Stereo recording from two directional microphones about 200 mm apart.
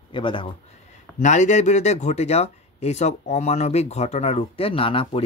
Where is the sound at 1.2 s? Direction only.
35° left (ahead or behind).